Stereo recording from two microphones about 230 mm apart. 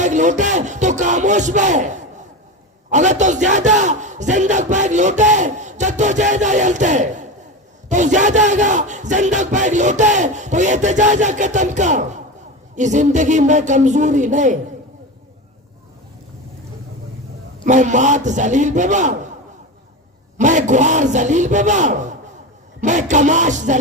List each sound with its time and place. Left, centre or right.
0.0 s music: right
2.9 s battle cry: right
17.6 s battle cry: right
20.4 s battle cry: right